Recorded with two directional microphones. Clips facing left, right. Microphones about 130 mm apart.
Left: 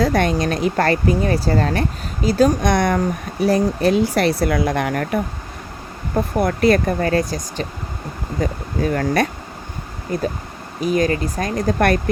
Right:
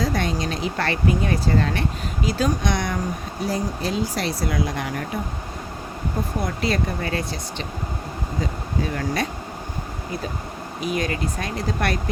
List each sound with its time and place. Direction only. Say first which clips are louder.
0.0 s speech: left 7 dB; 60° left (ahead or behind)
3.4 s speech: left 9 dB; 65° left (ahead or behind)
6.4 s speech: left 10 dB; 55° left (ahead or behind)